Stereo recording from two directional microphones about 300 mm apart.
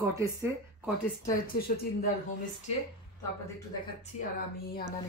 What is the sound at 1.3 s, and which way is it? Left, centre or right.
Speech, left.